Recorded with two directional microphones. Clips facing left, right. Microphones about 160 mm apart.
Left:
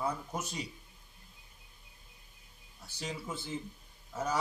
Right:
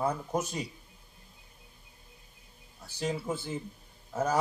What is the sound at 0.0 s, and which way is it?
Speech, 50° right (ahead or behind).